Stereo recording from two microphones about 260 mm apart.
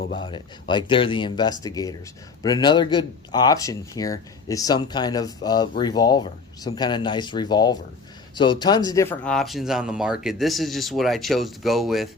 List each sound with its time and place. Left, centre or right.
0.1 s speech: centre